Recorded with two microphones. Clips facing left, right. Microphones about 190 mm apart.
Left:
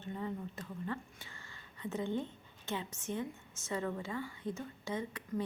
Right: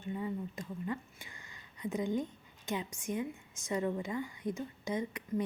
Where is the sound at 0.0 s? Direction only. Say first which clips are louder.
Right 3 dB; 10° right (ahead or behind).